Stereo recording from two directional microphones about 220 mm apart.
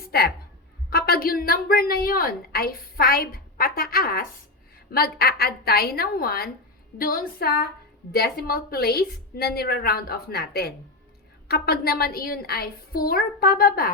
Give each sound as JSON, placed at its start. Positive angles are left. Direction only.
{"t": 0.0, "sound": "a woman's voice", "side_deg": 45}